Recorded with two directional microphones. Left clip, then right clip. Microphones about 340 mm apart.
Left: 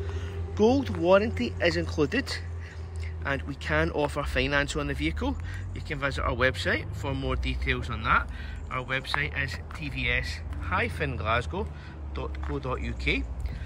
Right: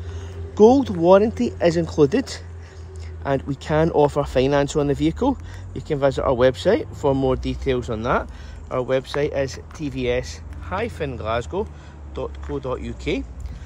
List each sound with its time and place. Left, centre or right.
0.1 s speech: centre